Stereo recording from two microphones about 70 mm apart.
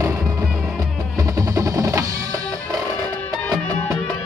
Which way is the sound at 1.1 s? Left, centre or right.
Right.